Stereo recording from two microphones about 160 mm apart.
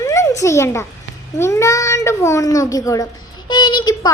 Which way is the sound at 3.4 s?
25° left (ahead or behind).